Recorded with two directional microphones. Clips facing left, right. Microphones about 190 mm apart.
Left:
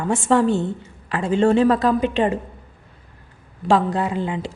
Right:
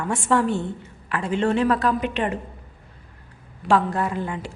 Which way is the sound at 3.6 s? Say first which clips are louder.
Left 2 dB; 20° left (ahead or behind).